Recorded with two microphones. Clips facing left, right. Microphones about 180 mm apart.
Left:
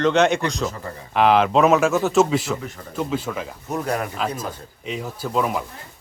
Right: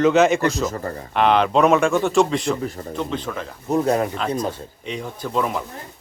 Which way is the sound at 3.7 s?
25° right (ahead or behind).